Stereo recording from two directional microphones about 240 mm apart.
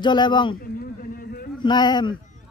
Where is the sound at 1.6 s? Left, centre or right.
Centre.